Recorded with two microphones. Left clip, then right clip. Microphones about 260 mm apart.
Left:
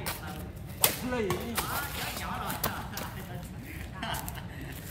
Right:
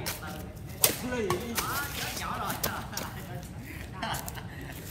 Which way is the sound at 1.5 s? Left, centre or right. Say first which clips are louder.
Right 1 dB; centre.